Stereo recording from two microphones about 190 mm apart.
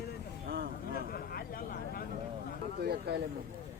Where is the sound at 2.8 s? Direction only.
60° right (ahead or behind).